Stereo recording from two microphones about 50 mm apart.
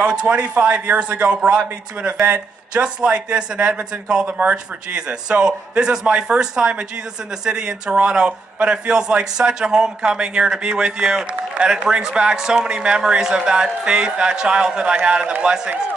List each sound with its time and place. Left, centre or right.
0.0 s speech: right